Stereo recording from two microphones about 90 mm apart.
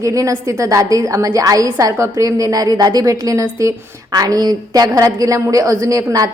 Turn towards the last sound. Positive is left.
turn(degrees=-40)  # may be behind; listen again after turning